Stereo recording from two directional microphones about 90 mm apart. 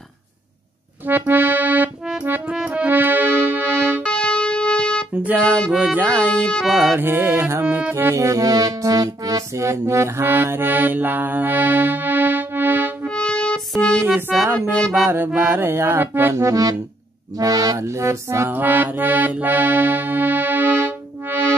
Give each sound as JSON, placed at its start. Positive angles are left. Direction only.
{"t": 1.0, "sound": "accordion", "side_deg": -20}
{"t": 2.2, "sound": "music", "side_deg": -20}
{"t": 4.0, "sound": "music", "side_deg": 10}
{"t": 5.1, "sound": "music", "side_deg": -15}
{"t": 6.3, "sound": "speech", "side_deg": 10}
{"t": 6.7, "sound": "music", "side_deg": 0}
{"t": 7.0, "sound": "music", "side_deg": -20}
{"t": 7.6, "sound": "music", "side_deg": -10}
{"t": 7.9, "sound": "music", "side_deg": -30}
{"t": 13.0, "sound": "music", "side_deg": 10}
{"t": 14.3, "sound": "music", "side_deg": 0}
{"t": 15.0, "sound": "music", "side_deg": -25}
{"t": 16.4, "sound": "music", "side_deg": -40}
{"t": 17.7, "sound": "music", "side_deg": -30}